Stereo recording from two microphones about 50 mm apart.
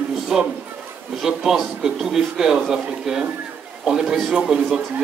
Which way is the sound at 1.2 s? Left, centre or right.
Centre.